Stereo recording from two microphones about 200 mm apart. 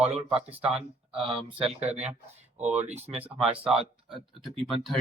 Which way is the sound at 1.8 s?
35° right (ahead or behind).